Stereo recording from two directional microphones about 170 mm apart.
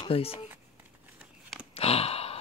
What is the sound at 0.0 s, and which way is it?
Speech, 35° left (ahead or behind).